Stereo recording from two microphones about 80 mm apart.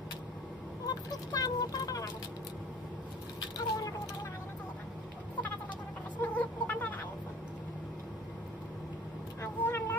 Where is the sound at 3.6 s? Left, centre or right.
Left.